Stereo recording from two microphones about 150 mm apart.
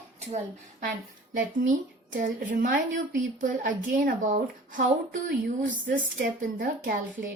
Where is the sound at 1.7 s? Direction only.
60° right (ahead or behind); by 6.9 s 75° right (ahead or behind).